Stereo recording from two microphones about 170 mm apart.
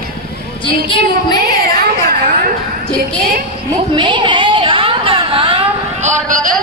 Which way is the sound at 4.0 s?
30° right (ahead or behind).